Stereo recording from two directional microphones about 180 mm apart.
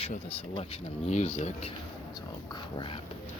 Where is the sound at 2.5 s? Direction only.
25° left (ahead or behind).